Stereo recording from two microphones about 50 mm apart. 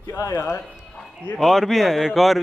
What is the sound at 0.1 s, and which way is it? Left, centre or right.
Speech, left.